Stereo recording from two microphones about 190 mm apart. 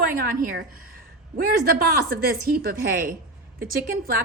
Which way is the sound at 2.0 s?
55° right (ahead or behind).